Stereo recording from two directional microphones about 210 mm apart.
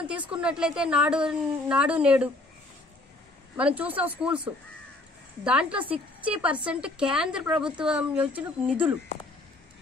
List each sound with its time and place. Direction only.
0.0 s a woman's voice: 5° right (ahead or behind)
3.5 s a woman's voice: 5° right (ahead or behind)